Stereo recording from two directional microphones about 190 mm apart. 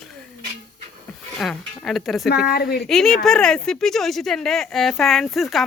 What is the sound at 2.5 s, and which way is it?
Speech, 55° left (ahead or behind).